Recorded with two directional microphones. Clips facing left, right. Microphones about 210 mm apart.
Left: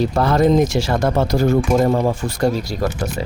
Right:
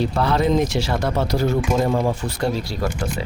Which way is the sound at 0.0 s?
45° left (ahead or behind).